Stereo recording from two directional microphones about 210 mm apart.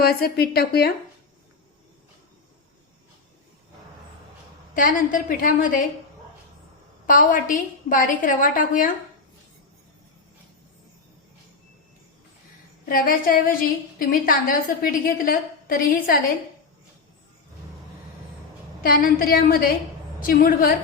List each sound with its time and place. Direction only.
0.0 s a woman's voice: 45° left (ahead or behind)
4.7 s a woman's voice: 40° left (ahead or behind)
7.1 s a woman's voice: 40° left (ahead or behind)
12.8 s a woman's voice: 40° left (ahead or behind)
18.8 s a woman's voice: 45° left (ahead or behind)